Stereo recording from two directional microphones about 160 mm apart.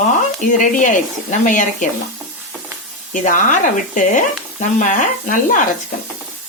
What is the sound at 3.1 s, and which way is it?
Speech, 55° left (ahead or behind).